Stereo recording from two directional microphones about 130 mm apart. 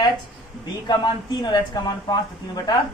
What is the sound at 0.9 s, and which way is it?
Speech, 35° left (ahead or behind).